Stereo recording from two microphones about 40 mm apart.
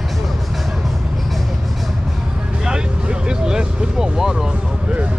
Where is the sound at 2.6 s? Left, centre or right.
Right.